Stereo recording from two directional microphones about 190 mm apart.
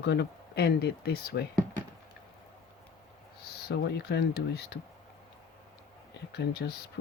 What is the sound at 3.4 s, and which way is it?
Speech, 60° left (ahead or behind).